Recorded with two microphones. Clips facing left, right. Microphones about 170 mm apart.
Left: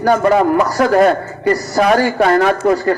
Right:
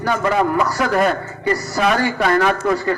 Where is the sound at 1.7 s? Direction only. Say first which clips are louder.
Left 6 dB; 45° left (ahead or behind).